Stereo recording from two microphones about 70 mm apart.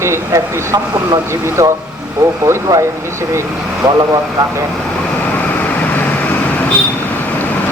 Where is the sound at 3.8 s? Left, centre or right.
Right.